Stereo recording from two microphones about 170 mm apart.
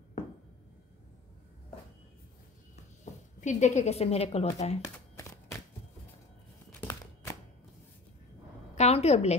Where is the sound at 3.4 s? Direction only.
45° left (ahead or behind).